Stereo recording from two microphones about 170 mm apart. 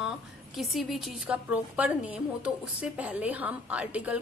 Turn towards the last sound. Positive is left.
turn(degrees=-10)  # may be behind; listen again after turning